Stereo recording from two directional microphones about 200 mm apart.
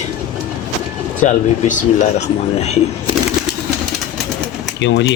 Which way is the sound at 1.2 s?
35° left (ahead or behind).